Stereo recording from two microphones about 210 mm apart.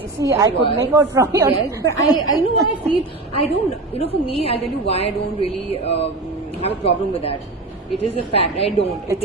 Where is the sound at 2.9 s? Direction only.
30° left (ahead or behind).